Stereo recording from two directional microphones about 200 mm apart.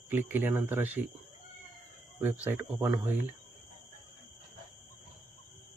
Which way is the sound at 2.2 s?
10° right (ahead or behind).